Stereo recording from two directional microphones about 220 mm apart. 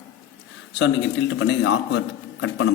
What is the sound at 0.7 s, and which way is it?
A man's voice, 55° left (ahead or behind).